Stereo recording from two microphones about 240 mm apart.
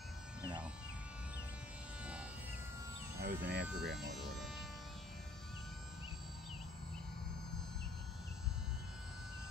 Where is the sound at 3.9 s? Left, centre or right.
Centre.